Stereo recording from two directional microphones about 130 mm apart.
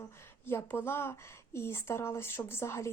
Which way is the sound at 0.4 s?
15° left (ahead or behind).